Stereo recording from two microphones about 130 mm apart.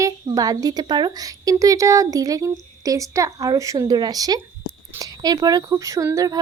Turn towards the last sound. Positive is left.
turn(degrees=-25)  # may be behind; listen again after turning